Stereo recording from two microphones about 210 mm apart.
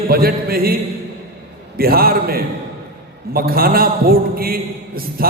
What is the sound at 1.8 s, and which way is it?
A man's voice, 45° right (ahead or behind).